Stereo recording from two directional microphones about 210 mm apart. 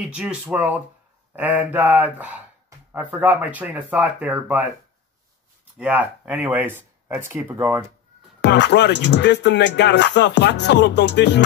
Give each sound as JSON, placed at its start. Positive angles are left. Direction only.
{"t": 0.0, "sound": "speech", "side_deg": -5}
{"t": 5.8, "sound": "speech", "side_deg": -5}
{"t": 8.4, "sound": "speech", "side_deg": 55}